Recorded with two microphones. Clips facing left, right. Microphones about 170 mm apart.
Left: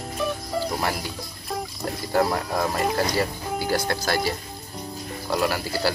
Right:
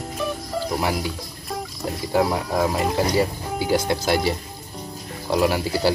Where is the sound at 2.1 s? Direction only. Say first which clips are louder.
Right 2 dB; 5° right (ahead or behind).